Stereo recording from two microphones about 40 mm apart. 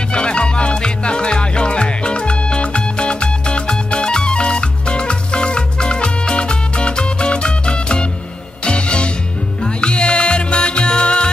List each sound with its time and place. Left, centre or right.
0.1 s music: left